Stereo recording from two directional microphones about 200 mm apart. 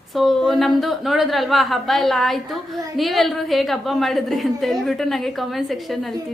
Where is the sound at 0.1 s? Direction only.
Centre (ahead or behind).